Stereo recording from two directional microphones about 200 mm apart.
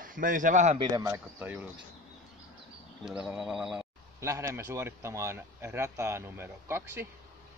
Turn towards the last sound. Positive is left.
turn(degrees=-10)  # may be behind; listen again after turning